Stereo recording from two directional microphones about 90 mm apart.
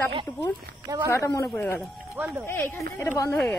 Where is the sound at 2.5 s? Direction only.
25° left (ahead or behind).